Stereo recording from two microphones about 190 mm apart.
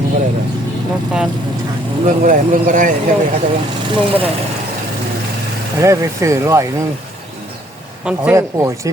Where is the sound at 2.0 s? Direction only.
45° right (ahead or behind).